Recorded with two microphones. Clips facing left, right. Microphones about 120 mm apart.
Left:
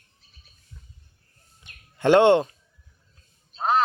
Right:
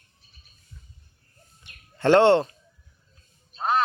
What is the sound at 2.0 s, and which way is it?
Speech, 15° left (ahead or behind).